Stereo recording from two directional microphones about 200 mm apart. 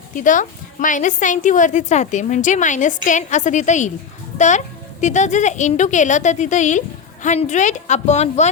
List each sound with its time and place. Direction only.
0.1 s a woman's voice: 40° left (ahead or behind)